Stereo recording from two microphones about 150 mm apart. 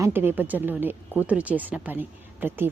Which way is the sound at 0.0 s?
15° right (ahead or behind).